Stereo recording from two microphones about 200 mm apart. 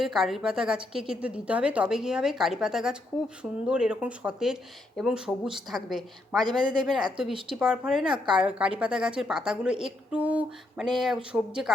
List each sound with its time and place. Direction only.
0.0 s a woman's voice: centre (ahead or behind)
6.4 s speech: 20° right (ahead or behind)
7.5 s a woman's voice: 5° right (ahead or behind)
8.0 s speech: 25° right (ahead or behind)
8.4 s a woman's voice: 5° right (ahead or behind)